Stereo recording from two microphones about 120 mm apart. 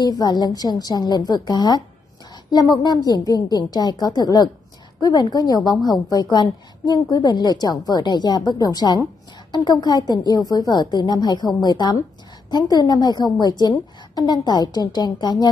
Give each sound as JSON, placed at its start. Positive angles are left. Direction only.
{"t": 0.0, "sound": "a woman's voice", "side_deg": 35}